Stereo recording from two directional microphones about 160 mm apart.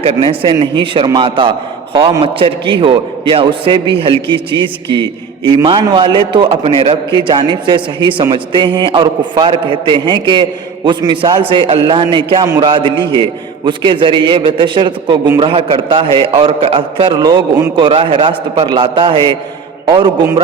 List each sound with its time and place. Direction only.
0.0 s a man's voice: 35° right (ahead or behind)